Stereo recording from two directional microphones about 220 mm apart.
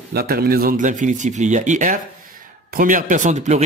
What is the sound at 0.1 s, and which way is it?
A man's voice, 45° right (ahead or behind).